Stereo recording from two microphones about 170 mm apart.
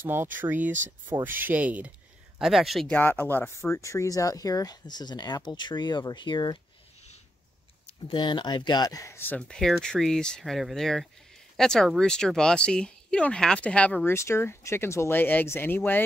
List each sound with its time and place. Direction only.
0.0 s speech: 10° right (ahead or behind); by 6.6 s 25° left (ahead or behind)
7.8 s speech: 30° left (ahead or behind); by 16.0 s 10° left (ahead or behind)